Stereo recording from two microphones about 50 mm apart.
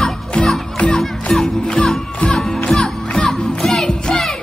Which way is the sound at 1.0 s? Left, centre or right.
Centre.